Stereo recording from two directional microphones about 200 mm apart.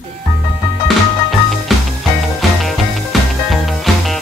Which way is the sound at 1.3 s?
Centre (ahead or behind).